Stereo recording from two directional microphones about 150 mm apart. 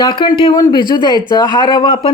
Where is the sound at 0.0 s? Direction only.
30° left (ahead or behind).